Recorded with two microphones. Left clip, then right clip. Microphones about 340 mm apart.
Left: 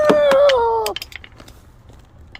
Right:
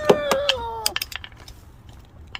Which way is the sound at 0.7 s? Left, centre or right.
Centre.